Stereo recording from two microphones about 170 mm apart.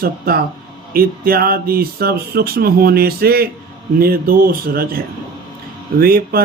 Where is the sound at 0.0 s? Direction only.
60° right (ahead or behind).